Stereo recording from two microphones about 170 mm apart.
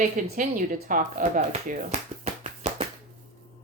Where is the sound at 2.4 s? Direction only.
40° right (ahead or behind).